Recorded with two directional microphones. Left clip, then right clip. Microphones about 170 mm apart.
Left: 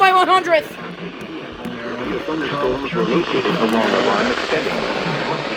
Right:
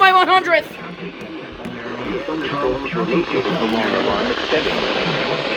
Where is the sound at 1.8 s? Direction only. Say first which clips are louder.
Left 1 dB; 40° left (ahead or behind).